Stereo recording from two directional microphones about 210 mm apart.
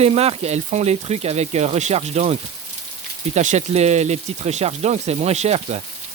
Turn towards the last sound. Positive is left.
turn(degrees=-30)  # may be behind; listen again after turning